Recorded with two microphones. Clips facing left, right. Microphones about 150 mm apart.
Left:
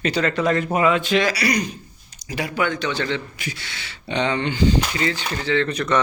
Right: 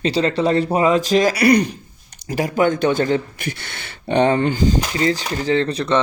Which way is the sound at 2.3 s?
40° right (ahead or behind).